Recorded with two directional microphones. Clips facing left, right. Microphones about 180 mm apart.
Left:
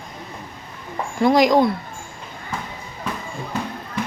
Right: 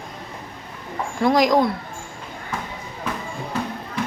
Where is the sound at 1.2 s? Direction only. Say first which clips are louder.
Left 2 dB; centre (ahead or behind).